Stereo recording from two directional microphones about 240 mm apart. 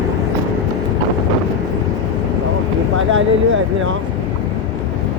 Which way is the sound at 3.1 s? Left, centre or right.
Right.